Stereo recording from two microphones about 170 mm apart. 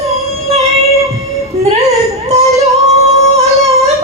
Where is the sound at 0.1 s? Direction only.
35° right (ahead or behind).